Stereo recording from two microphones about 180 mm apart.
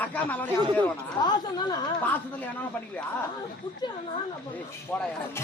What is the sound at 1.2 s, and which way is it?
Speech, 25° left (ahead or behind).